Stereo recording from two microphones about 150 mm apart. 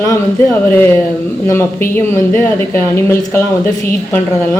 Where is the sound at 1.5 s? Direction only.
15° left (ahead or behind).